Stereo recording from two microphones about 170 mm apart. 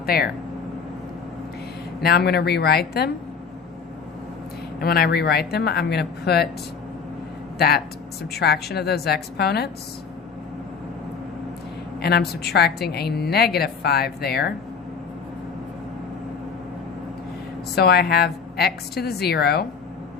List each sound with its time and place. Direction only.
0.0 s speech: 65° left (ahead or behind)
2.0 s a woman's voice: 70° left (ahead or behind)
4.8 s a woman's voice: 65° left (ahead or behind)
8.3 s a woman's voice: 70° left (ahead or behind)
11.9 s a woman's voice: 70° left (ahead or behind)
17.7 s a woman's voice: 70° left (ahead or behind)